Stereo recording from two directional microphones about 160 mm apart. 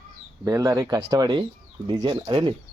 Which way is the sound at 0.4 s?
20° right (ahead or behind).